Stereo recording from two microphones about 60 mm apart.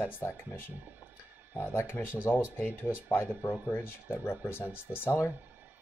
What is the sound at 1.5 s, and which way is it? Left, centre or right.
Speech, left.